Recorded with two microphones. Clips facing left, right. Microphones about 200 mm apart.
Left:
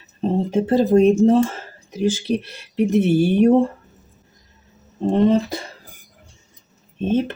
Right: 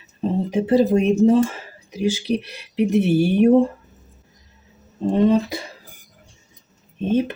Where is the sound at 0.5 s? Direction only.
10° right (ahead or behind).